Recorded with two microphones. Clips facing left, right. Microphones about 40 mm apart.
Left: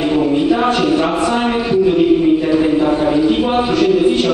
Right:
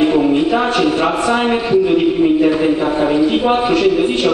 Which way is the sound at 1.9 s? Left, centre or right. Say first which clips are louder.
Left 1 dB; centre.